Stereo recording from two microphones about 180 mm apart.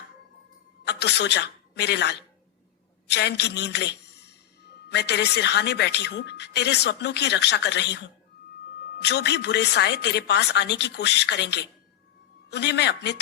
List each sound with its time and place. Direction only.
0.9 s a woman's voice: 70° left (ahead or behind)